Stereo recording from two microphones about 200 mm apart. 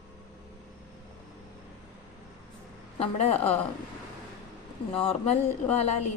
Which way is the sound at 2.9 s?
30° left (ahead or behind).